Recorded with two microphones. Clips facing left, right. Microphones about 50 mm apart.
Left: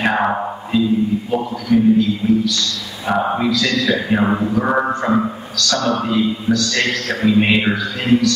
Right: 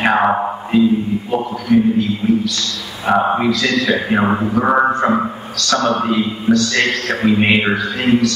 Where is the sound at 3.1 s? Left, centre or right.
Centre.